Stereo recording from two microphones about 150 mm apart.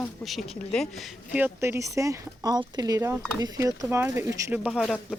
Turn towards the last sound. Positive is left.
turn(degrees=-5)  # may be behind; listen again after turning